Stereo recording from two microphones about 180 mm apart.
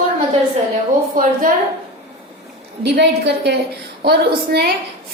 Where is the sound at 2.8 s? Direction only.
70° right (ahead or behind).